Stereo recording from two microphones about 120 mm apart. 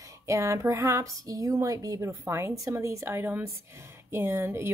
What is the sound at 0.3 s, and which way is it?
Speech, 25° right (ahead or behind).